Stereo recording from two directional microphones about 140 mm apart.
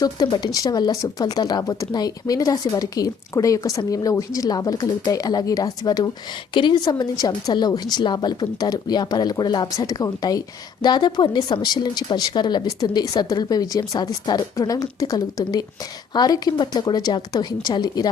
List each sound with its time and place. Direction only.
0.0 s speech: 30° left (ahead or behind)